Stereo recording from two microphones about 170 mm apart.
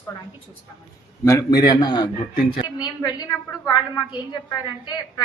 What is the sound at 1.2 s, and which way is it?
A woman's voice, 20° left (ahead or behind).